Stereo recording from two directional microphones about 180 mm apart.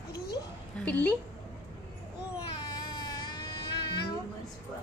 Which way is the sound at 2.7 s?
25° left (ahead or behind).